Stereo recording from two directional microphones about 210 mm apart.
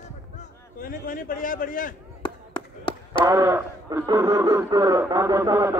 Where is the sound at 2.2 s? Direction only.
25° left (ahead or behind).